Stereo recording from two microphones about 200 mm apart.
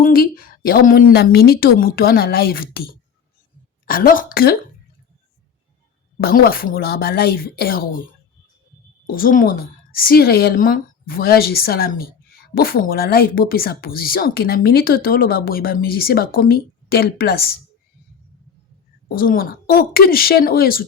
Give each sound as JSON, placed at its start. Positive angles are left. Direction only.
{"t": 0.0, "sound": "speech", "side_deg": 45}
{"t": 6.1, "sound": "speech", "side_deg": 50}
{"t": 9.0, "sound": "speech", "side_deg": 45}
{"t": 19.0, "sound": "speech", "side_deg": 45}